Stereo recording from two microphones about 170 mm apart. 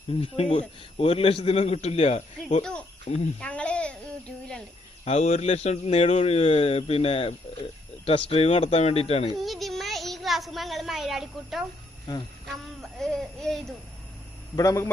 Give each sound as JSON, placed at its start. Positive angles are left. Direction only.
{"t": 0.1, "sound": "speech", "side_deg": 35}
{"t": 3.4, "sound": "speech", "side_deg": 5}
{"t": 5.0, "sound": "speech", "side_deg": 40}
{"t": 9.4, "sound": "a woman's voice", "side_deg": 0}
{"t": 12.1, "sound": "a man's voice", "side_deg": 20}
{"t": 12.8, "sound": "speech", "side_deg": 0}
{"t": 14.5, "sound": "a man's voice", "side_deg": 20}